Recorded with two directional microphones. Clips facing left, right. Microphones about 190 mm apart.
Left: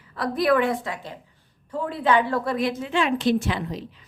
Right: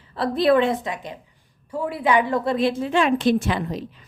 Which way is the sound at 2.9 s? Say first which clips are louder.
Right 2 dB; 45° right (ahead or behind).